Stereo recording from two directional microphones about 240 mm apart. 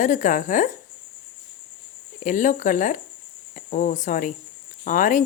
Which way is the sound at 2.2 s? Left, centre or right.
Left.